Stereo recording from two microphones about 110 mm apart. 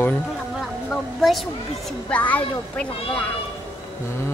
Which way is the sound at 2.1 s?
15° left (ahead or behind).